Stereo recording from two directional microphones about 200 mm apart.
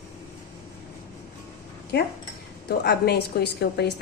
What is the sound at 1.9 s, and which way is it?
A woman's voice, 55° left (ahead or behind).